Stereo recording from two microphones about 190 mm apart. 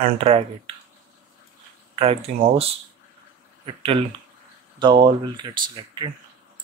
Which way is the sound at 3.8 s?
30° right (ahead or behind).